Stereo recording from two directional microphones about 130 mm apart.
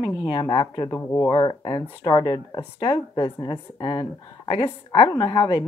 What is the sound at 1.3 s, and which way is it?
Speech, 35° left (ahead or behind).